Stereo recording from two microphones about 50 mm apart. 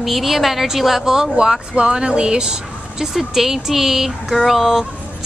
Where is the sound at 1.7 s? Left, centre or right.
Centre.